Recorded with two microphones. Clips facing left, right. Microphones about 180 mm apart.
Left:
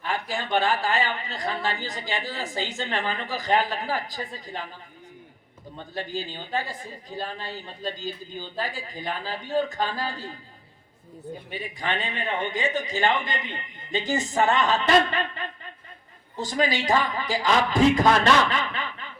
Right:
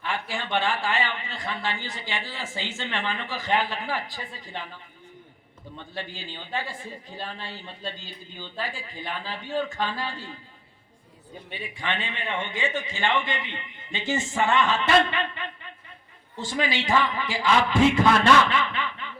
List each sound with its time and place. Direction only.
0.0 s a man's voice: 40° left (ahead or behind)
5.7 s a man's voice: 40° left (ahead or behind)
11.5 s a man's voice: 40° left (ahead or behind)
18.5 s snicker: 40° left (ahead or behind)